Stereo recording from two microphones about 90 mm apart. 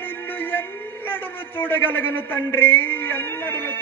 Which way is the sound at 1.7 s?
25° left (ahead or behind).